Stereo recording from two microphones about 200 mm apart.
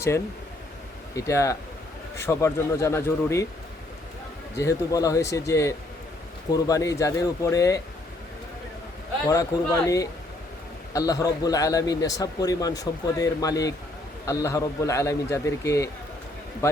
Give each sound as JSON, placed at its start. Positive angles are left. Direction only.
{"t": 1.1, "sound": "a man's voice", "side_deg": 15}
{"t": 4.5, "sound": "a man's voice", "side_deg": 15}
{"t": 9.3, "sound": "a man's voice", "side_deg": 15}